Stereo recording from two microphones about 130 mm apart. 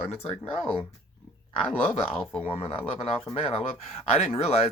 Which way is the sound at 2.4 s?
45° left (ahead or behind).